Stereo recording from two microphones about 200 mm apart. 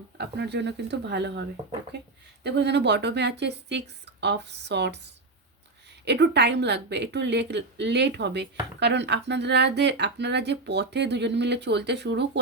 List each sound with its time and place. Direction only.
0.2 s a woman's voice: 55° right (ahead or behind)
6.1 s a woman's voice: 60° right (ahead or behind)